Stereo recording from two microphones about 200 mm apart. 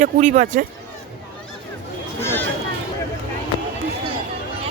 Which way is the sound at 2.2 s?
10° left (ahead or behind).